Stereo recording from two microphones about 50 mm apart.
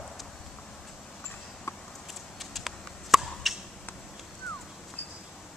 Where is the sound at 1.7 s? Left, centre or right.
Left.